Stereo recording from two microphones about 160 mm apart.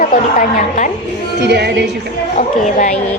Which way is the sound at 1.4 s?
90° right.